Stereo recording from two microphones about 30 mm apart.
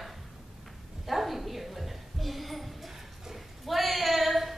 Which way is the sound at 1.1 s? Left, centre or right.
Centre.